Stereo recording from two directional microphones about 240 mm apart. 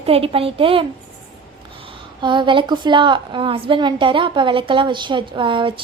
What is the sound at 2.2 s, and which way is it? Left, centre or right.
A woman's voice, centre.